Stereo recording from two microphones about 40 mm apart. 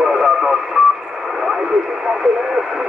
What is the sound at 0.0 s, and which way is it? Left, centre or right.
Radio, centre.